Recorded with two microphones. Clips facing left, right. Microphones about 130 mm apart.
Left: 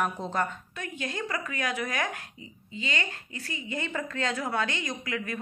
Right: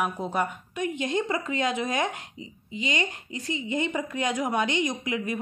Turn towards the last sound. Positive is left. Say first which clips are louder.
# right 4 dB
turn(degrees=-20)  # may be behind; listen again after turning